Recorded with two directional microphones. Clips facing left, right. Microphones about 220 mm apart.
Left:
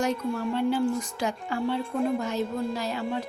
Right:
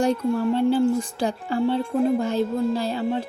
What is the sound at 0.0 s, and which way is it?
Speech, 30° right (ahead or behind).